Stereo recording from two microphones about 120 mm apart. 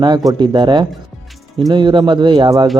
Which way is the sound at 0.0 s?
35° right (ahead or behind).